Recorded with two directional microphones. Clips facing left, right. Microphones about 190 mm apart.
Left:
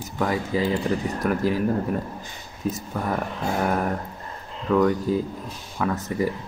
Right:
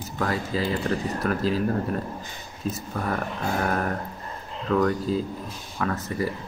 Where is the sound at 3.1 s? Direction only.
20° left (ahead or behind).